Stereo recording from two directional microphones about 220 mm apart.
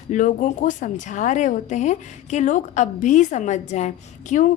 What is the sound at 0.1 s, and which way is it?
A woman's voice, 35° left (ahead or behind).